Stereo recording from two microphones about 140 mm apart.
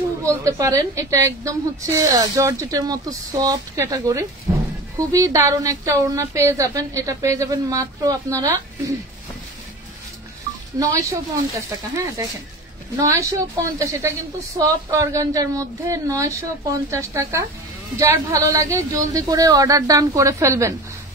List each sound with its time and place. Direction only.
0.2 s a woman's voice: 20° right (ahead or behind)
10.8 s a woman's voice: 25° right (ahead or behind)